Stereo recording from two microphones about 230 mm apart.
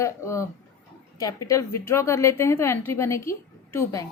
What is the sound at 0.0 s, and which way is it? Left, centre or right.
A woman's voice, centre.